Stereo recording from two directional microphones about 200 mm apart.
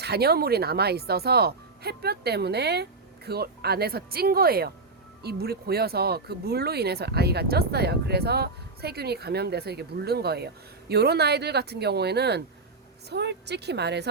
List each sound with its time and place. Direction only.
0.0 s a woman's voice: 55° right (ahead or behind)